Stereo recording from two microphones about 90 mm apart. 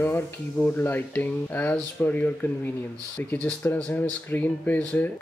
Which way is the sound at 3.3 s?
15° left (ahead or behind).